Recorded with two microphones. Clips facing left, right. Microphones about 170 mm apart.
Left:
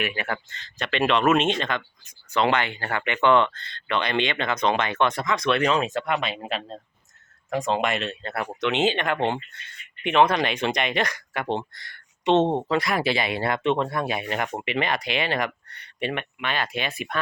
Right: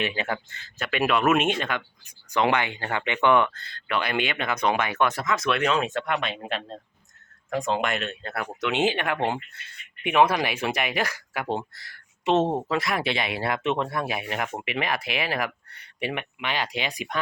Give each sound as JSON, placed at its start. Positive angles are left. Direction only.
{"t": 0.0, "sound": "speech", "side_deg": -25}
{"t": 0.3, "sound": "speech", "side_deg": -10}
{"t": 8.7, "sound": "speech", "side_deg": -10}